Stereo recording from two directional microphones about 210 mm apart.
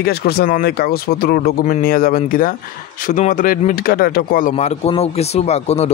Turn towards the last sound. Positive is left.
turn(degrees=30)  # may be behind; listen again after turning